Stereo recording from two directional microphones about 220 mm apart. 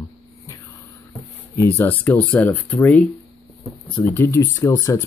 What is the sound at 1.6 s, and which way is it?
Speech, 10° left (ahead or behind).